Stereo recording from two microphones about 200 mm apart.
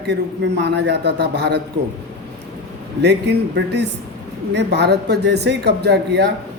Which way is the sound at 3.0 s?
60° right (ahead or behind).